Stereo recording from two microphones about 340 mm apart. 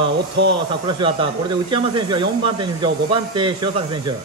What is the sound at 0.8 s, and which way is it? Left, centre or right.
Speech, centre.